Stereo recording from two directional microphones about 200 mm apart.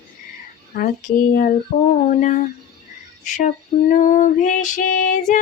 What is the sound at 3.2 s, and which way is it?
Female singing, 35° left (ahead or behind).